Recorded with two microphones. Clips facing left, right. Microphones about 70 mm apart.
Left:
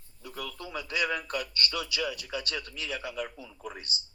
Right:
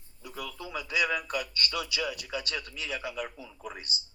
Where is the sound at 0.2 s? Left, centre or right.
Centre.